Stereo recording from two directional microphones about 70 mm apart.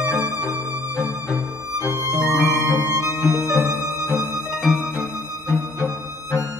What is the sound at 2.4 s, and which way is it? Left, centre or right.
Music, left.